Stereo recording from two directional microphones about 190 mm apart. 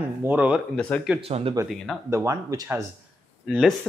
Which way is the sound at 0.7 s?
5° left (ahead or behind).